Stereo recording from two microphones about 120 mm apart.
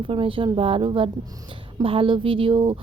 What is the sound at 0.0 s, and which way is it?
A woman's voice, 45° right (ahead or behind).